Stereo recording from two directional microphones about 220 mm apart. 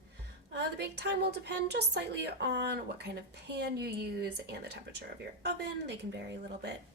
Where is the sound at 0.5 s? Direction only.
50° right (ahead or behind).